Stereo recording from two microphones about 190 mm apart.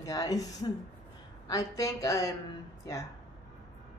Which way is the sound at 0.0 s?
20° left (ahead or behind).